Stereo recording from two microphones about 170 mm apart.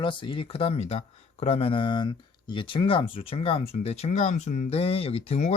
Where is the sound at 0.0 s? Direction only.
30° left (ahead or behind).